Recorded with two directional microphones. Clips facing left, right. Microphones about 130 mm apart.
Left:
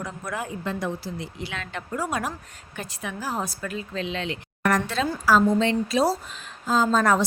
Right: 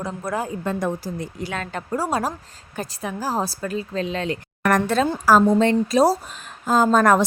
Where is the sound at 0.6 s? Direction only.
50° right (ahead or behind).